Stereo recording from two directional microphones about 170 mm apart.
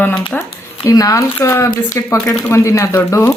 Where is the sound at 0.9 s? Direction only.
20° left (ahead or behind).